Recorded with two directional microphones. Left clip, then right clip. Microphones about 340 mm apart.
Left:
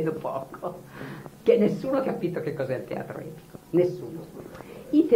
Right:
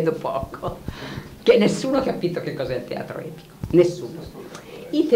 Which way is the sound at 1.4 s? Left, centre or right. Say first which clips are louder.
Right 5 dB; left.